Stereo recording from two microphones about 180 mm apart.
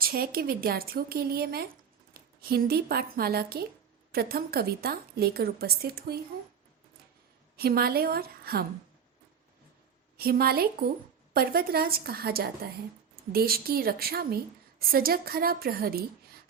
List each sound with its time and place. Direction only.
0.0 s a woman's voice: 55° right (ahead or behind)
7.5 s a woman's voice: 55° right (ahead or behind)
10.2 s a woman's voice: 60° right (ahead or behind)